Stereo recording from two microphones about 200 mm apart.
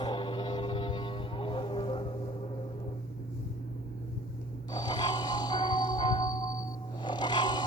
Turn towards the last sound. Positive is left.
turn(degrees=20)  # may be behind; listen again after turning